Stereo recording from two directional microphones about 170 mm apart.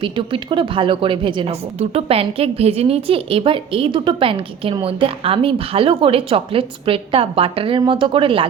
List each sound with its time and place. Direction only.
0.0 s a woman's voice: 30° right (ahead or behind)